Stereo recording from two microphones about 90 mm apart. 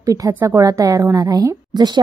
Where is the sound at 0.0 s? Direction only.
40° right (ahead or behind).